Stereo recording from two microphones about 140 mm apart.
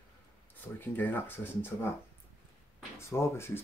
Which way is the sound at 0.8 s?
15° left (ahead or behind).